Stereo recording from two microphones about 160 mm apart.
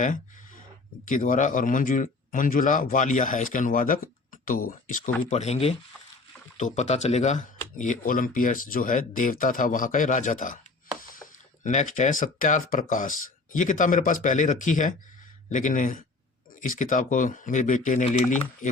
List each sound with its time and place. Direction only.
0.0 s a sound: 55° left (ahead or behind)
1.0 s speech: 55° left (ahead or behind)
5.3 s speech: 45° left (ahead or behind)
11.6 s speech: 50° left (ahead or behind)